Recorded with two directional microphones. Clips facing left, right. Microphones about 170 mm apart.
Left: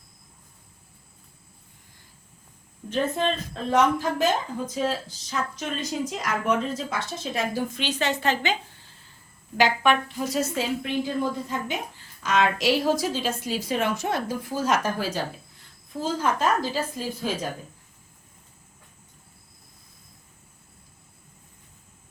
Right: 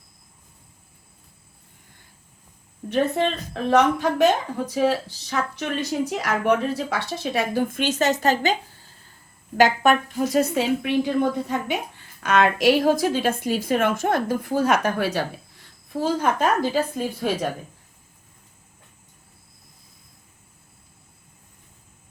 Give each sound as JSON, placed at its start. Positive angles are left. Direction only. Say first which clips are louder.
{"t": 2.9, "sound": "speech", "louder": "right 3 dB", "side_deg": -70}